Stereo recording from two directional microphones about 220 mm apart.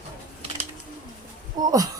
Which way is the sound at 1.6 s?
15° right (ahead or behind).